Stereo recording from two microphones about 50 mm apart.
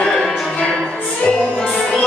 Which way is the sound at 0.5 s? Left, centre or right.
Left.